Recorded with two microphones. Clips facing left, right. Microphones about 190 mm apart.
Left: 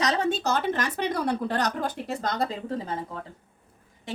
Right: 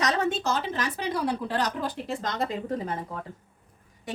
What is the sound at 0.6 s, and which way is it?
A woman's voice, 50° left (ahead or behind).